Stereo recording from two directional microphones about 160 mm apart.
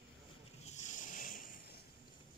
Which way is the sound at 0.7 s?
50° left (ahead or behind).